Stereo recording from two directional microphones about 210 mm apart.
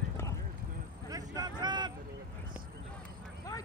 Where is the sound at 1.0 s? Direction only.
15° right (ahead or behind).